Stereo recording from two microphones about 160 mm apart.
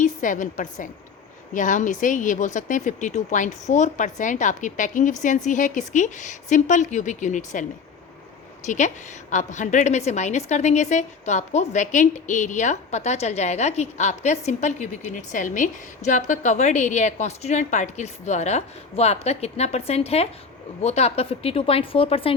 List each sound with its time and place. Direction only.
0.0 s a woman's voice: 55° left (ahead or behind); by 22.4 s 35° left (ahead or behind)